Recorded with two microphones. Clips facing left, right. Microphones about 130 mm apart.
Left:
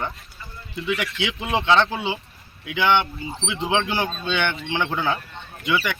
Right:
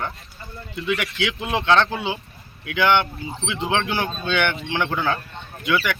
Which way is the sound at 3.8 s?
15° left (ahead or behind).